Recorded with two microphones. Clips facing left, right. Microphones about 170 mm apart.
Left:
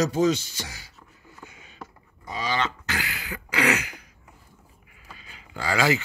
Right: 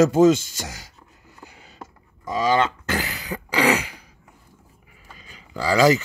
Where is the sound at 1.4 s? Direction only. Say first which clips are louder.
Right 2 dB; 35° right (ahead or behind).